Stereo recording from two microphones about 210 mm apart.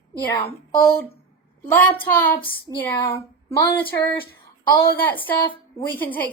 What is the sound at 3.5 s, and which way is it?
Speech, 15° left (ahead or behind).